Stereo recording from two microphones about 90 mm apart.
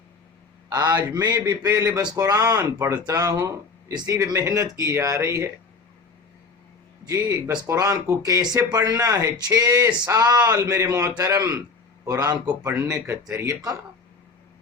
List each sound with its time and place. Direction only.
0.9 s speech: 45° right (ahead or behind)
1.7 s speech: 30° right (ahead or behind)
2.0 s speech: 45° right (ahead or behind)
7.0 s speech: 40° right (ahead or behind)